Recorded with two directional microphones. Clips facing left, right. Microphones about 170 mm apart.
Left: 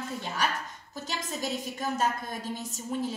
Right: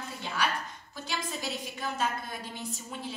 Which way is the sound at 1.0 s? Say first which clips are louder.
Left 1 dB; 45° left (ahead or behind).